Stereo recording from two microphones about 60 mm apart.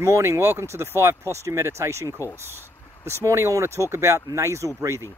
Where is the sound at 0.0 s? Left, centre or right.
Right.